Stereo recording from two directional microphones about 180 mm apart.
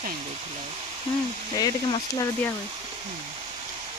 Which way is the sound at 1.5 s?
20° left (ahead or behind).